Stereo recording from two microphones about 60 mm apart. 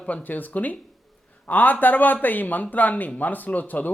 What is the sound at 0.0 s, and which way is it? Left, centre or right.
A man's voice, left.